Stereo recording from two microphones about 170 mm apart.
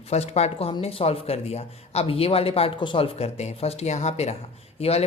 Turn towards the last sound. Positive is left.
turn(degrees=35)  # may be behind; listen again after turning